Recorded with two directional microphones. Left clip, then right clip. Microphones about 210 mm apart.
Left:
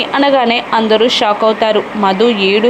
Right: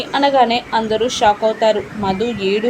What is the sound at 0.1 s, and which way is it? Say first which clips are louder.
A woman's voice: left 1 dB; 20° left (ahead or behind).